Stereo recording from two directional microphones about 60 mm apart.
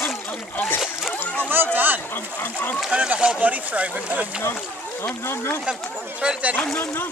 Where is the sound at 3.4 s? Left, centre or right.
Right.